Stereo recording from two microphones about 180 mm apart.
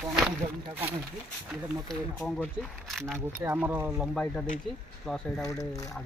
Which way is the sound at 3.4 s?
10° right (ahead or behind).